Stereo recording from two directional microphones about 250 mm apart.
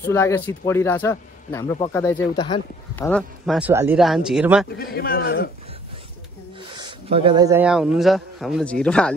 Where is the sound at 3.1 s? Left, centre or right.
Centre.